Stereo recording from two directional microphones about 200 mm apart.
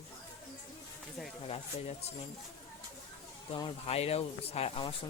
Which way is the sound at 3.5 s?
30° left (ahead or behind).